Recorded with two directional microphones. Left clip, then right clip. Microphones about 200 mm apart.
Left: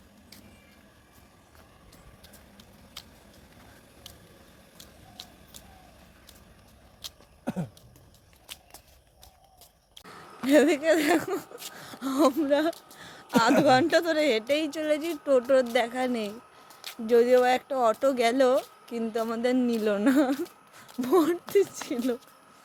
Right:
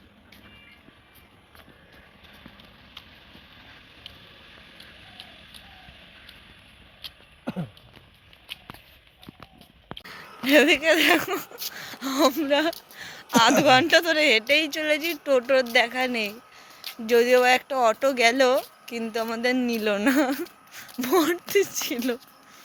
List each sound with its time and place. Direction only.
7.4 s a sound: 35° right (ahead or behind)
10.4 s speech: centre (ahead or behind)
11.8 s a sound: 5° left (ahead or behind)
13.7 s speech: 5° left (ahead or behind)
17.1 s speech: centre (ahead or behind)
20.3 s speech: 5° right (ahead or behind)